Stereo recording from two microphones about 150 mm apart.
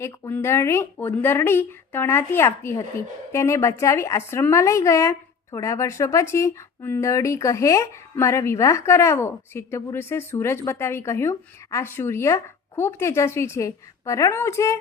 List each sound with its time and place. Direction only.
0.0 s speech: 15° left (ahead or behind)